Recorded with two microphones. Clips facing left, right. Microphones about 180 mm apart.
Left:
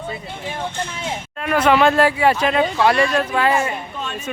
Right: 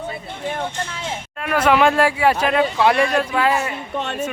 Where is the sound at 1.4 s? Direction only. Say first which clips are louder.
Left 1 dB; 5° right (ahead or behind).